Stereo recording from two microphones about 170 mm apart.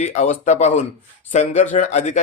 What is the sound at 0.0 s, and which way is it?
Speech, 45° left (ahead or behind).